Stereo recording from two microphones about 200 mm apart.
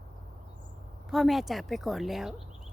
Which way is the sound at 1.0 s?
Centre (ahead or behind).